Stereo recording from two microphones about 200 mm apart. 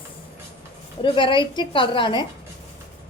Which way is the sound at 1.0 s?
25° left (ahead or behind).